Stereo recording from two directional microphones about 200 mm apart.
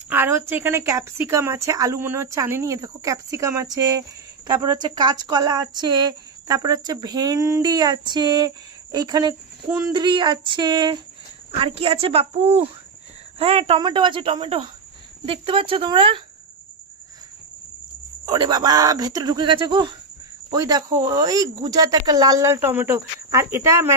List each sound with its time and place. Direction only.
0.1 s a woman's voice: 10° right (ahead or behind); by 16.2 s 25° right (ahead or behind)
18.2 s a woman's voice: 20° right (ahead or behind)